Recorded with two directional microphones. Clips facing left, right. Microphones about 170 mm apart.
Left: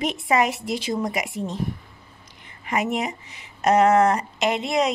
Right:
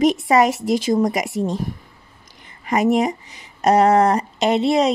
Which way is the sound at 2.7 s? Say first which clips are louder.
Right 7 dB; 40° right (ahead or behind).